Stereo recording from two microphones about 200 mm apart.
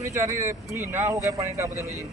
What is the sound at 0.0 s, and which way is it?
Speech, 15° right (ahead or behind).